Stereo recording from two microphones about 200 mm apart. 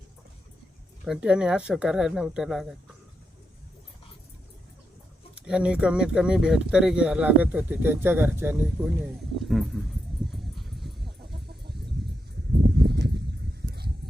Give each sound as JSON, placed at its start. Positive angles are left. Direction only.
{"t": 1.0, "sound": "speech", "side_deg": -5}
{"t": 5.3, "sound": "speech", "side_deg": -5}
{"t": 10.9, "sound": "chicken", "side_deg": -55}